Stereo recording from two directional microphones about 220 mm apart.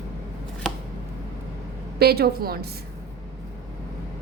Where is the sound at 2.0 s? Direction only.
45° right (ahead or behind).